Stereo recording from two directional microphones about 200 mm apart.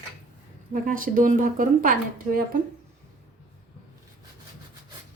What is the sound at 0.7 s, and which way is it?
A woman's voice, 40° right (ahead or behind).